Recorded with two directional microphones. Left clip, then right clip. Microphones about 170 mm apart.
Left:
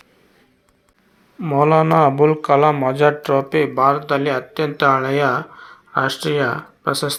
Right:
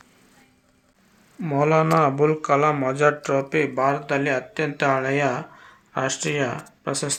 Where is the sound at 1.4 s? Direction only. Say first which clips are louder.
Left 5 dB; 15° left (ahead or behind).